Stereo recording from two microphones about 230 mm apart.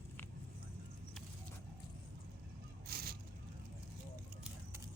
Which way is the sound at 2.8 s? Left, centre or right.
Right.